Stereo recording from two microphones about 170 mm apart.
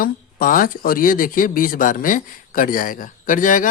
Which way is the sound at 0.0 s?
55° left (ahead or behind).